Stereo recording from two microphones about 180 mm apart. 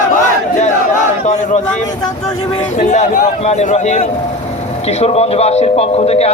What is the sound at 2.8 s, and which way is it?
A man's voice, 40° left (ahead or behind).